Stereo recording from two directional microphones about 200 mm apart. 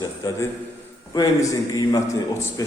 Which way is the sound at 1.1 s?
20° left (ahead or behind).